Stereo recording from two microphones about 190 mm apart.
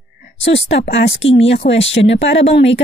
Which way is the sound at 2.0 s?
70° left (ahead or behind).